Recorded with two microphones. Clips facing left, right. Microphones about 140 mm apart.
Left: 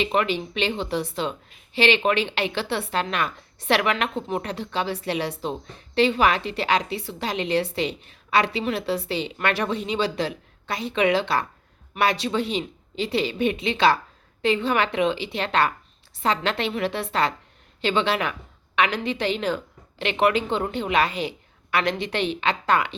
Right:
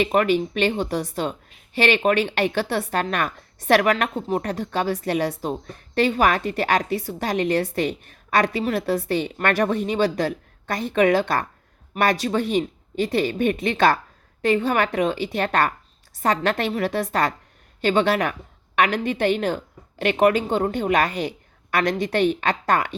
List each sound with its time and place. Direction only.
0.0 s a woman's voice: 45° right (ahead or behind)